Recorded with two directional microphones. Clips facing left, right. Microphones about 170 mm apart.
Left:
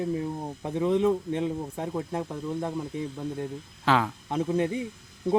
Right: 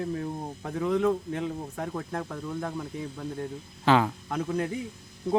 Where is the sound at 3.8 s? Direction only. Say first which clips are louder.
Right 2 dB; centre (ahead or behind).